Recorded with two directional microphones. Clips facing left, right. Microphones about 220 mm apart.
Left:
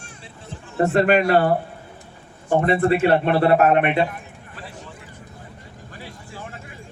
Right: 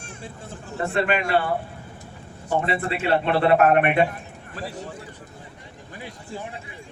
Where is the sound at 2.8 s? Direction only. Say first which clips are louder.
Left 6 dB; 45° left (ahead or behind).